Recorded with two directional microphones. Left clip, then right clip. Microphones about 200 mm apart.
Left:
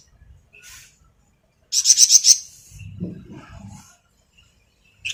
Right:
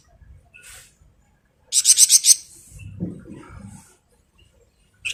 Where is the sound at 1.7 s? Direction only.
15° right (ahead or behind).